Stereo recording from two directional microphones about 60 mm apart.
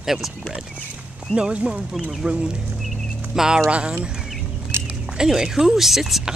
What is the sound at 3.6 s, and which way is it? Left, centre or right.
Speech, right.